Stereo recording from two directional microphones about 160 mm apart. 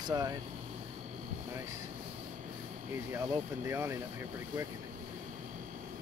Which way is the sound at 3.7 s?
15° right (ahead or behind).